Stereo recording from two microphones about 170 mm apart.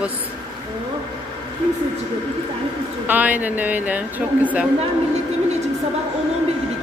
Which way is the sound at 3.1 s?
10° right (ahead or behind).